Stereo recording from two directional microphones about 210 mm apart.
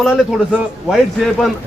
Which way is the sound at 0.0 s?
Centre (ahead or behind).